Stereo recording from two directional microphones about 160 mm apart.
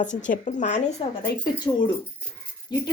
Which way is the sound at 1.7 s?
20° left (ahead or behind).